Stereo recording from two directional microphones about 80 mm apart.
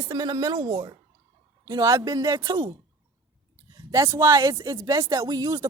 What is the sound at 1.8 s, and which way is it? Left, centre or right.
Speech, right.